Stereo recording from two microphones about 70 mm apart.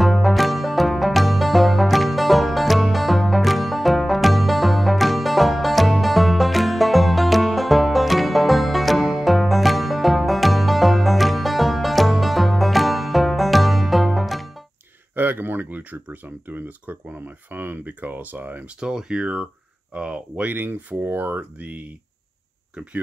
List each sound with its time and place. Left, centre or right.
0.0 s music: centre
15.1 s speech: right
18.8 s speech: centre
20.5 s speech: right